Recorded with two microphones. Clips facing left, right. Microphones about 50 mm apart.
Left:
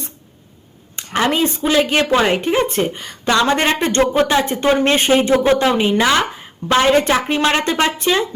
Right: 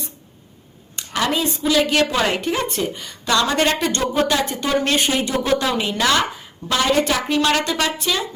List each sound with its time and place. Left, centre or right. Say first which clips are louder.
0.9 s a woman's voice: left 4 dB; left